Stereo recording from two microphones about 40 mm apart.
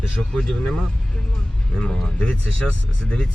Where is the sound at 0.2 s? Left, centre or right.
Centre.